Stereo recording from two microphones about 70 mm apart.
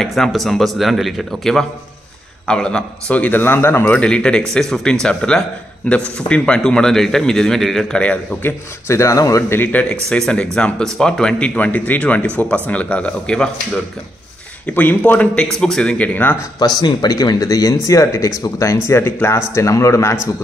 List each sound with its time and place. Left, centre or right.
0.0 s a man's voice: centre; by 3.8 s left
3.8 s speech: centre
8.4 s speech: left
8.9 s a man's voice: left
9.5 s speech: left
14.7 s a man's voice: left
16.5 s a man's voice: left